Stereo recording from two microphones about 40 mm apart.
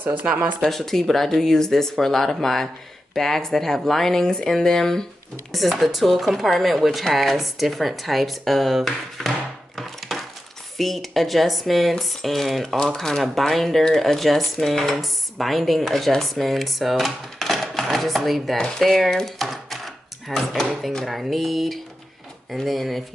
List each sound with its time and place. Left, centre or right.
0.6 s speech: centre
5.5 s speech: centre
9.8 s coin: centre
10.8 s speech: centre
12.6 s speech: centre